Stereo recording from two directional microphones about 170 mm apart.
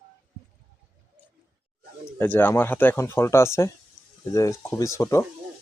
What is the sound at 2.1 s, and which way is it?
Speech, 10° left (ahead or behind).